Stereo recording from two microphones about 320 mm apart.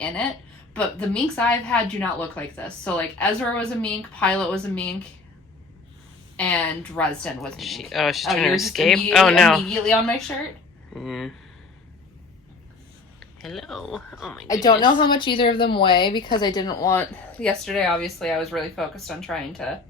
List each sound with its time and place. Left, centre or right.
0.7 s a woman's voice: centre
6.3 s a woman's voice: centre
13.1 s speech: centre
14.4 s speech: centre